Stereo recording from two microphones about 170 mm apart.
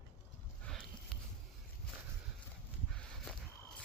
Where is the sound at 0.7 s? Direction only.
5° left (ahead or behind).